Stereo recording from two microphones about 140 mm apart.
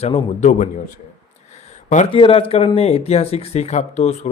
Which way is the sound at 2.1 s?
40° left (ahead or behind).